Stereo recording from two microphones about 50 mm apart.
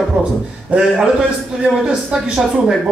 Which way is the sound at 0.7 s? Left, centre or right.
Right.